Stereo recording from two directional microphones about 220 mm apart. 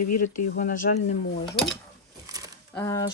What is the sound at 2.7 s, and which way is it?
Speech, 15° left (ahead or behind).